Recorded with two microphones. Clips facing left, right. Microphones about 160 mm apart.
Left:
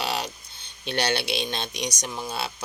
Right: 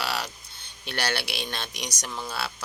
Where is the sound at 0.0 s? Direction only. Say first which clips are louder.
Left 2 dB; 20° left (ahead or behind).